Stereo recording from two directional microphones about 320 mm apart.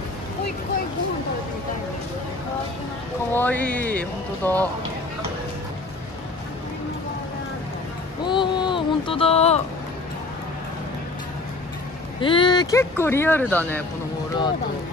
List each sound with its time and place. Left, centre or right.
3.3 s speech: centre
8.3 s speech: centre
12.2 s speech: centre